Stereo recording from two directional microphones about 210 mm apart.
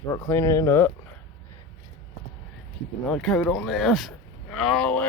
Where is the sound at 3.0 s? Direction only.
Centre (ahead or behind).